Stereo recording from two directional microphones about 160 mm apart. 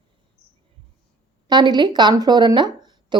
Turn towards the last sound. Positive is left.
turn(degrees=-25)  # may be behind; listen again after turning